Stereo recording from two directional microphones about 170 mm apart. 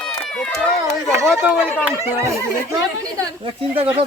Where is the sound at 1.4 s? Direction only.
10° right (ahead or behind).